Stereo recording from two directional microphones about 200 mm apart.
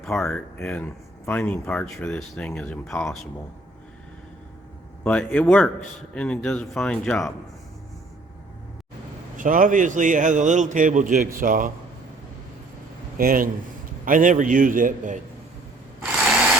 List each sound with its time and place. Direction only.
0.0 s speech: centre (ahead or behind)
5.0 s speech: 5° left (ahead or behind)
9.4 s a man's voice: 40° right (ahead or behind)
13.1 s a man's voice: 45° right (ahead or behind)